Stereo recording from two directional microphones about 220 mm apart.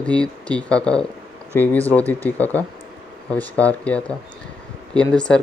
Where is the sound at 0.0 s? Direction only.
5° left (ahead or behind).